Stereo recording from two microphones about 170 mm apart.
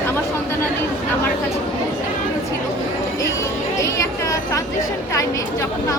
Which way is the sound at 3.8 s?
20° left (ahead or behind).